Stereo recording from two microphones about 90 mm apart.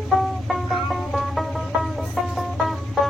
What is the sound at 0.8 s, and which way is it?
Music, centre (ahead or behind).